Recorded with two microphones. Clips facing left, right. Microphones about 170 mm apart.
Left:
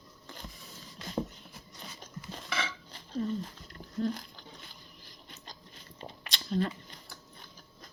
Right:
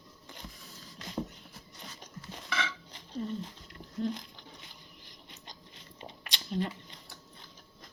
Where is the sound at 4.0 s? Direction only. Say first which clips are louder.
Left 1 dB; 20° right (ahead or behind).